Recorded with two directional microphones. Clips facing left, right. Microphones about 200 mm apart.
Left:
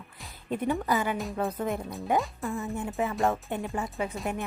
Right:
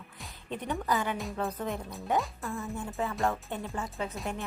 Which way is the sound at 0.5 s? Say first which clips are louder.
Left 4 dB; 5° left (ahead or behind).